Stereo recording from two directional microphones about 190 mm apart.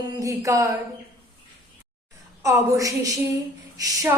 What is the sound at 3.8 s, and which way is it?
Speech, 20° right (ahead or behind).